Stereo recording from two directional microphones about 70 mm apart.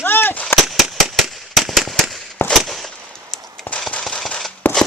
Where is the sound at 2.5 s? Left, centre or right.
Centre.